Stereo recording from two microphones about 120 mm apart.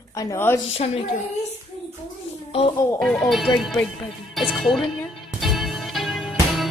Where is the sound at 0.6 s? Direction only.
55° left (ahead or behind).